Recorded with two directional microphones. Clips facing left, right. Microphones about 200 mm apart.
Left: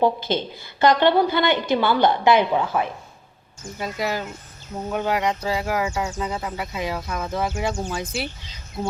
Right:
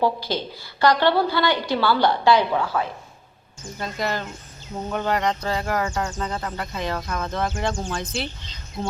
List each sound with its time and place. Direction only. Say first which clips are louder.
0.0 s a woman's voice: left 2 dB; 20° left (ahead or behind)
3.8 s speech: left 1 dB; 10° left (ahead or behind)